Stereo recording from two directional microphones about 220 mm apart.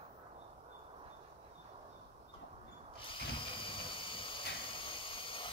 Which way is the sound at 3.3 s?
25° left (ahead or behind).